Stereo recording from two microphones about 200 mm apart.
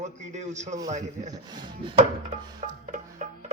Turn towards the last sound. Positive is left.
turn(degrees=-40)  # may be behind; listen again after turning